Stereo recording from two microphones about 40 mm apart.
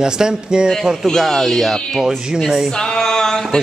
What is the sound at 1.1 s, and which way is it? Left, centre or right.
Speech, centre.